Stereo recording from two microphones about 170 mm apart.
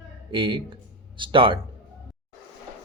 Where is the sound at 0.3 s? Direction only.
30° right (ahead or behind).